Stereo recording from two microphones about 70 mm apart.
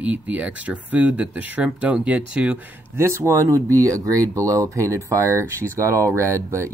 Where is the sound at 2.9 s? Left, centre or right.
Right.